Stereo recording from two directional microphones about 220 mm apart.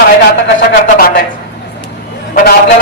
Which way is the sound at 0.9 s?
45° left (ahead or behind).